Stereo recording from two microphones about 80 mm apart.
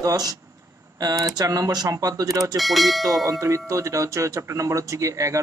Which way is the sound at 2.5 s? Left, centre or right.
Centre.